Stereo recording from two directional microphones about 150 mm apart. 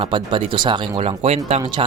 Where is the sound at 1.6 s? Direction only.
30° right (ahead or behind).